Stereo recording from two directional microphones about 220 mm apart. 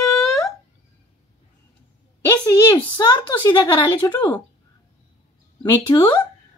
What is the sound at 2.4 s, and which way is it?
A woman's voice, 15° left (ahead or behind).